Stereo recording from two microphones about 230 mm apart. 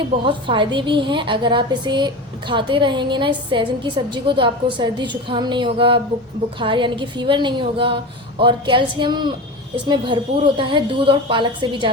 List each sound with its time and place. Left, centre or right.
0.3 s a woman's voice: right